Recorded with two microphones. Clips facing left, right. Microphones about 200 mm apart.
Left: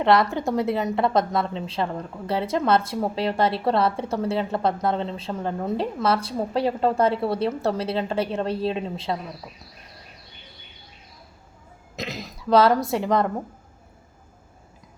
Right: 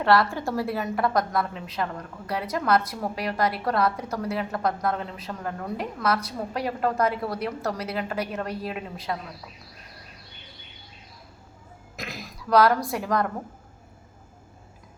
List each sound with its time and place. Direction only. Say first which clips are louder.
0.0 s a woman's voice: left 2 dB; 20° left (ahead or behind)
11.9 s speech: left 5 dB; 20° left (ahead or behind)